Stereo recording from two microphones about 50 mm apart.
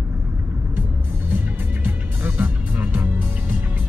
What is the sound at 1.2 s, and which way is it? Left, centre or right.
Music, right.